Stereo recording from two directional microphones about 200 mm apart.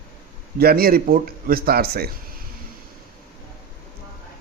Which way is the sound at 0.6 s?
50° right (ahead or behind).